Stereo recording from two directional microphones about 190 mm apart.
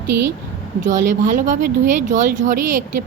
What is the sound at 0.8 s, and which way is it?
Speech, 40° right (ahead or behind).